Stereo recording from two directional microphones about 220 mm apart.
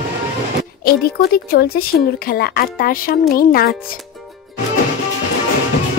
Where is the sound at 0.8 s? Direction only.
45° left (ahead or behind).